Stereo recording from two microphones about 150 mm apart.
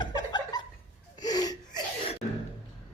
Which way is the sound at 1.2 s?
25° left (ahead or behind).